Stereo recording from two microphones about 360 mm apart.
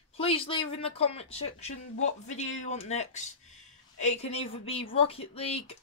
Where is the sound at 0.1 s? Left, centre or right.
Centre.